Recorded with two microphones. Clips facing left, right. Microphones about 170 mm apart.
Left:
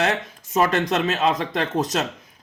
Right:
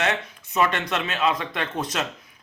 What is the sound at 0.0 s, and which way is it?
Speech, 40° left (ahead or behind).